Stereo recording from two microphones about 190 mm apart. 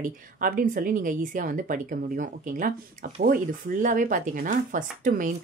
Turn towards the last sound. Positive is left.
turn(degrees=-45)  # may be behind; listen again after turning